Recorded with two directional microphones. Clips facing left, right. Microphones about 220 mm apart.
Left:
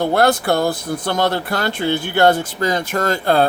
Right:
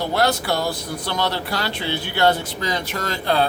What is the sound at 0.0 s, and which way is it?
Speech, 50° left (ahead or behind).